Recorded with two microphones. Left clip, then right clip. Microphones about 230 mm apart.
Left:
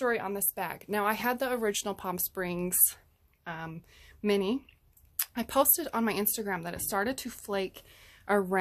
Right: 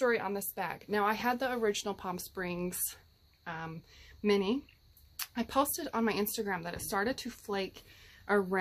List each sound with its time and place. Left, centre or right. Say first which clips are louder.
0.0 s speech: even; left